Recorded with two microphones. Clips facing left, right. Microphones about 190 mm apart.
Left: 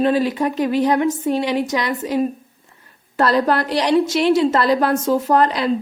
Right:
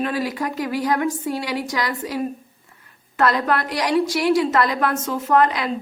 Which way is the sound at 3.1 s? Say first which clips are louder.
Left 3 dB; 35° left (ahead or behind).